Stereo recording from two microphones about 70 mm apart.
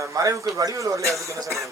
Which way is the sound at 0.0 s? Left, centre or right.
Right.